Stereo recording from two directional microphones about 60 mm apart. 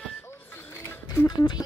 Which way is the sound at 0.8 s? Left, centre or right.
Left.